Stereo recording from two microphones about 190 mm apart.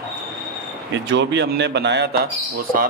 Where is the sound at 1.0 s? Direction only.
65° right (ahead or behind).